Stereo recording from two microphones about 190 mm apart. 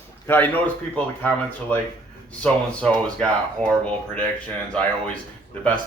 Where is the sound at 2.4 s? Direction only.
5° left (ahead or behind).